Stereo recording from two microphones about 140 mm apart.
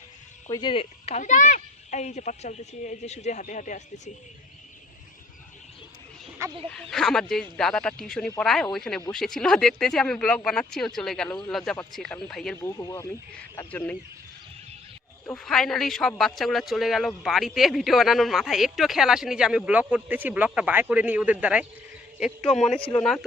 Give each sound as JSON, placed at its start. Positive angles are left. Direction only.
{"t": 0.5, "sound": "a child's voice", "side_deg": 35}
{"t": 6.9, "sound": "speech", "side_deg": 5}
{"t": 12.6, "sound": "speech", "side_deg": 20}
{"t": 13.7, "sound": "speech", "side_deg": 10}
{"t": 15.4, "sound": "speech", "side_deg": 0}